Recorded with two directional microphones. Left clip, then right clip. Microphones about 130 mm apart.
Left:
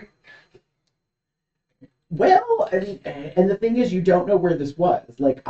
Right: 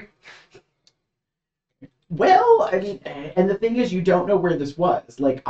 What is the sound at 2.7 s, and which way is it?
Speech, 10° right (ahead or behind).